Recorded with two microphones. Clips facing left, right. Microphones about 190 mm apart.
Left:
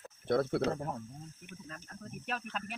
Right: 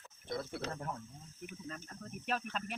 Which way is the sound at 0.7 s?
30° left (ahead or behind).